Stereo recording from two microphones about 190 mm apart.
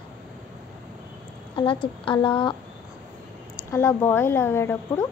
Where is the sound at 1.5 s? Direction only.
25° left (ahead or behind).